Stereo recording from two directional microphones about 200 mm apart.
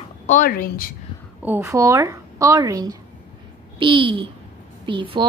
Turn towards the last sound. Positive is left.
turn(degrees=-25)  # may be behind; listen again after turning